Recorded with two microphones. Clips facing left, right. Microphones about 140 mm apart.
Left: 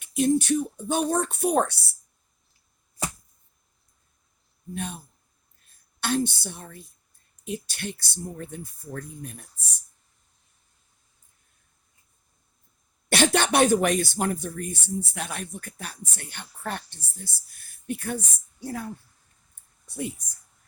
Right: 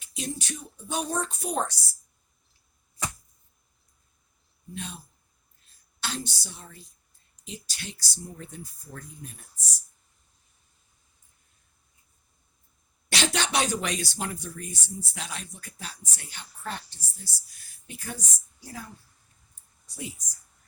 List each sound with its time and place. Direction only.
0.0 s speech: 55° left (ahead or behind)
4.7 s speech: 55° left (ahead or behind)
13.1 s speech: 55° left (ahead or behind)
19.9 s speech: 55° left (ahead or behind)